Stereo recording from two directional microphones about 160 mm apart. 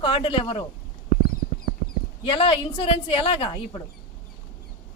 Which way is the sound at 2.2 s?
30° left (ahead or behind).